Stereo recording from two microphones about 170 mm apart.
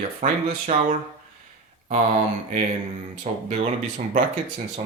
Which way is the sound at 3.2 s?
45° right (ahead or behind).